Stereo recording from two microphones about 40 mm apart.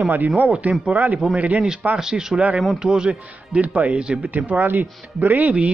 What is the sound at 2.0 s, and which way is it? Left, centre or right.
Speech, centre.